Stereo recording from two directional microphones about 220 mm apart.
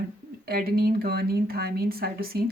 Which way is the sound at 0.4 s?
45° right (ahead or behind).